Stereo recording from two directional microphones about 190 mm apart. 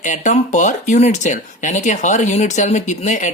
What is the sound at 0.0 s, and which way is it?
Speech, 40° left (ahead or behind).